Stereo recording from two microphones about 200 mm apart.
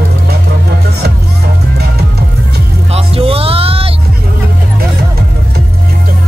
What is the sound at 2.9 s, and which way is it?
Music, 30° right (ahead or behind).